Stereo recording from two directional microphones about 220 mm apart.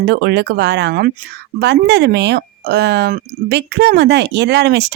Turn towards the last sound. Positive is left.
turn(degrees=-50)  # may be behind; listen again after turning